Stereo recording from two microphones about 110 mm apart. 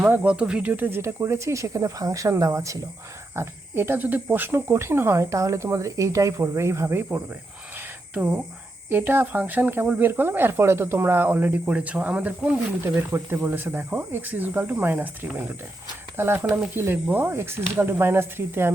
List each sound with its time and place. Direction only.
0.0 s speech: 10° right (ahead or behind)
7.8 s a sound: 15° right (ahead or behind)
8.9 s speech: 20° right (ahead or behind)